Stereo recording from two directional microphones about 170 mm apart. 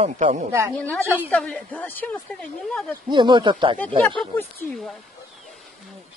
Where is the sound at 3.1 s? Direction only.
25° right (ahead or behind).